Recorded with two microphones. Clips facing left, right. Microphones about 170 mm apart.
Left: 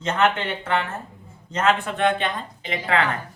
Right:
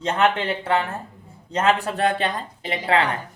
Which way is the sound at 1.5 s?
35° right (ahead or behind).